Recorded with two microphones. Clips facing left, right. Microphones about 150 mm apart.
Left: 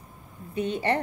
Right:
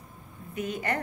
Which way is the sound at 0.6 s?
30° left (ahead or behind).